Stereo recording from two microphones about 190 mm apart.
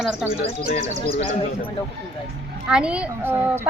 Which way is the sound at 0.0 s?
Centre (ahead or behind).